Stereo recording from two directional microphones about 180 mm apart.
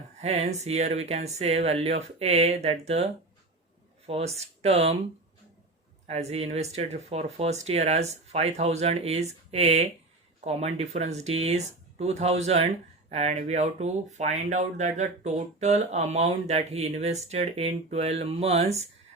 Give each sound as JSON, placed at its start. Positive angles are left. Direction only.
{"t": 0.2, "sound": "speech", "side_deg": -35}
{"t": 6.1, "sound": "speech", "side_deg": -35}